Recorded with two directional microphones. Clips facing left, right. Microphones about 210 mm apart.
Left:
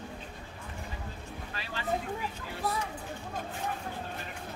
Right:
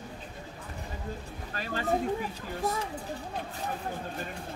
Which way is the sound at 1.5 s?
45° right (ahead or behind).